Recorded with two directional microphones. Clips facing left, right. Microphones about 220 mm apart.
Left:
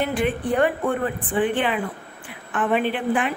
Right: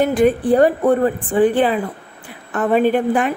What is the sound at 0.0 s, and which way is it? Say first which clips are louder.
A woman's voice: right 8 dB; 40° right (ahead or behind).